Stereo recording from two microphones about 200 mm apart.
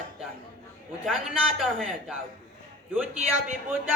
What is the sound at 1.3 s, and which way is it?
Speech, centre (ahead or behind).